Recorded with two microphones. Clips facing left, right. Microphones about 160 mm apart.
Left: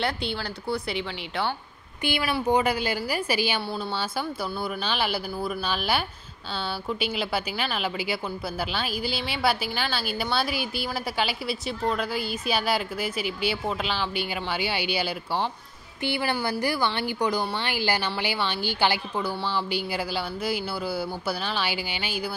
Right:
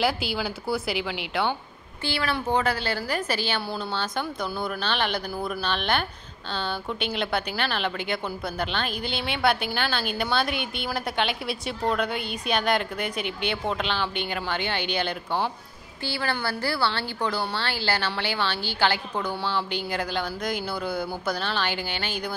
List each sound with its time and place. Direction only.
0.0 s speech: 5° right (ahead or behind)
2.0 s a woman's voice: 15° left (ahead or behind)
16.0 s a woman's voice: 20° left (ahead or behind)